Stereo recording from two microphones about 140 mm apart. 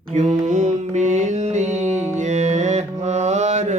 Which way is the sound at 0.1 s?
60° right (ahead or behind).